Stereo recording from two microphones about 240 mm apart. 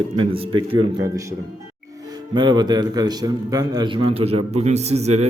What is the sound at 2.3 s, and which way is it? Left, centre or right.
A man's voice, centre.